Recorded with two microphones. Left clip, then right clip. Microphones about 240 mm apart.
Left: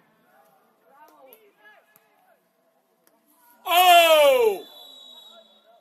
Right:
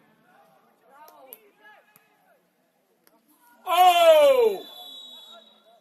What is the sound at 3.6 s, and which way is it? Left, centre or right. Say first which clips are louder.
Speech: left 2 dB; left.